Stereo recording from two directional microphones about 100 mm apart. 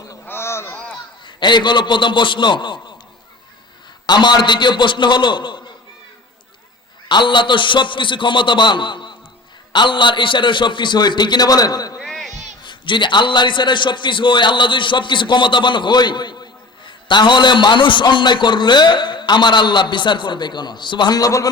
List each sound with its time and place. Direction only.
0.3 s a sound: 25° left (ahead or behind)
1.4 s a man's voice: 50° left (ahead or behind)
4.0 s a man's voice: 45° left (ahead or behind)
7.1 s a man's voice: 50° left (ahead or behind)
12.0 s a sound: 5° left (ahead or behind)
12.3 s a man's voice: 50° left (ahead or behind); by 21.4 s 35° left (ahead or behind)